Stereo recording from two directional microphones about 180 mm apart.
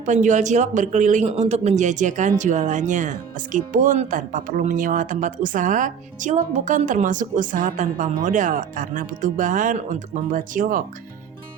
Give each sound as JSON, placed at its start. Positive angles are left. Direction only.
{"t": 0.0, "sound": "speech", "side_deg": -40}